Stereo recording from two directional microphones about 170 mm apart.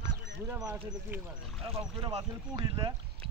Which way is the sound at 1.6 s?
35° right (ahead or behind).